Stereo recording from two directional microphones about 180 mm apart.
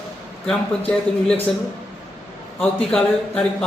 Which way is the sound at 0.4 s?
5° left (ahead or behind).